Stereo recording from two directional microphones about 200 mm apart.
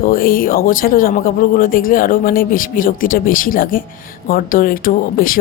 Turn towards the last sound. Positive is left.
turn(degrees=45)  # may be behind; listen again after turning